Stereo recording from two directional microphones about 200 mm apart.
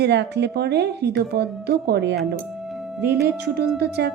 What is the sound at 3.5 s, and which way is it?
Speech, 55° right (ahead or behind).